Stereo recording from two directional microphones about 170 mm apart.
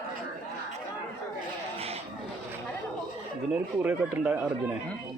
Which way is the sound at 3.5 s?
10° right (ahead or behind).